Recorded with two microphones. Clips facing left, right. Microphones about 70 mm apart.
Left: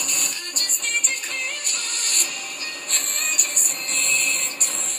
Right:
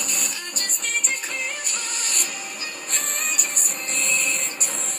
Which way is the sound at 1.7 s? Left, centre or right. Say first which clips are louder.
Right 1 dB; left.